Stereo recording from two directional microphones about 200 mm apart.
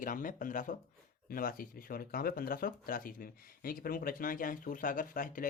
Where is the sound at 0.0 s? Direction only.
40° left (ahead or behind).